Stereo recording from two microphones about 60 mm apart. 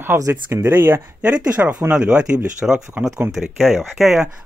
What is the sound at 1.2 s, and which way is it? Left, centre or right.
Speech, right.